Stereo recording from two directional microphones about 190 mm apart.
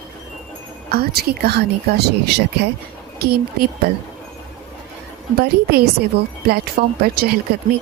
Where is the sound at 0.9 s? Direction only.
55° right (ahead or behind).